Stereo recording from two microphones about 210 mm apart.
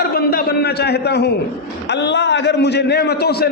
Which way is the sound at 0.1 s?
45° left (ahead or behind).